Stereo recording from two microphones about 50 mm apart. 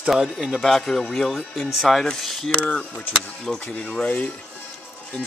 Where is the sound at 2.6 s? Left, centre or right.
Centre.